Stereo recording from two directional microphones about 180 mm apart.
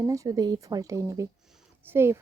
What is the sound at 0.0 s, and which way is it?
A woman's voice, 20° right (ahead or behind).